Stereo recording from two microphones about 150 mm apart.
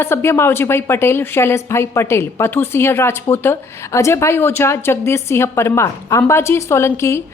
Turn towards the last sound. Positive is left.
turn(degrees=15)  # may be behind; listen again after turning